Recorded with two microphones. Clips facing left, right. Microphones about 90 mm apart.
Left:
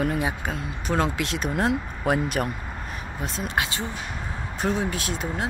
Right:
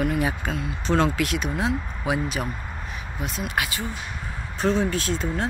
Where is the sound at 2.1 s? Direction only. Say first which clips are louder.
Left 2 dB; 55° left (ahead or behind).